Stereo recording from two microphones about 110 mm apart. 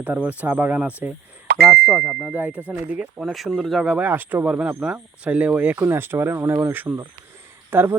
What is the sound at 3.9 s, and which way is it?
Speech, 15° right (ahead or behind).